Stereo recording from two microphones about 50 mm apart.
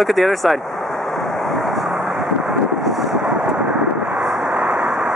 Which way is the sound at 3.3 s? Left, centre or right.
Centre.